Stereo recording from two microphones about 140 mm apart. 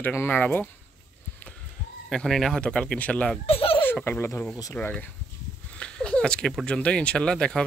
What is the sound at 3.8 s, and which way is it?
Speech, 15° left (ahead or behind).